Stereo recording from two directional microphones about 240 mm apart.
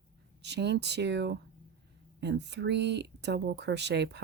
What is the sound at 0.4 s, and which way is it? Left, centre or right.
Speech, right.